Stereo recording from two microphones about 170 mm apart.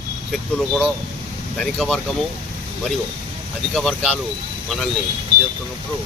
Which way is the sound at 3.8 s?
Centre (ahead or behind).